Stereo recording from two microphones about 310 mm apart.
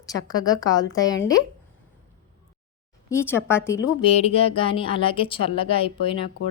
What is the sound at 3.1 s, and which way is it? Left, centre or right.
A woman's voice, centre.